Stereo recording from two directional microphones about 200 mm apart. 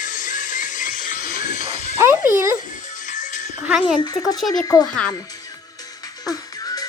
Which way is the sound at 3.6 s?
5° right (ahead or behind).